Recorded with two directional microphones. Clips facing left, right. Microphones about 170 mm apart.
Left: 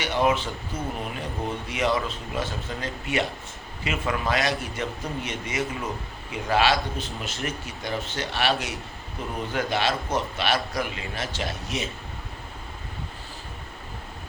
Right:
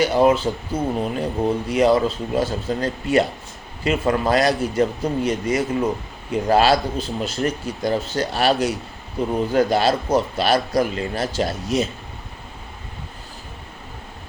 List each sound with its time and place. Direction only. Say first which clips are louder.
0.0 s a man's voice: right 7 dB; 35° right (ahead or behind)